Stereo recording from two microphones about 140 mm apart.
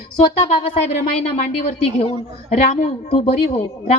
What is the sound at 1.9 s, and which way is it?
A woman's voice, 50° left (ahead or behind).